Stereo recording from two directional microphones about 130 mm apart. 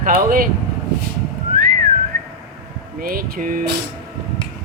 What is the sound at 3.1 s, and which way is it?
Speech, 90° right.